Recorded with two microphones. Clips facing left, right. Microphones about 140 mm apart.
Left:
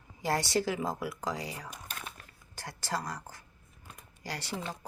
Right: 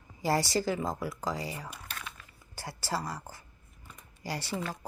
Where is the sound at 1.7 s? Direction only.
45° left (ahead or behind).